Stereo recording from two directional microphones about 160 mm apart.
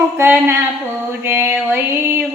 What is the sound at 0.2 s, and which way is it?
Music, 15° right (ahead or behind).